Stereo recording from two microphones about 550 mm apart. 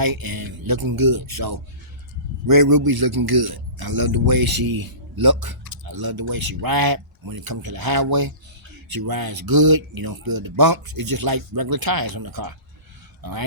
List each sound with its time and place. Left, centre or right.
0.0 s speech: right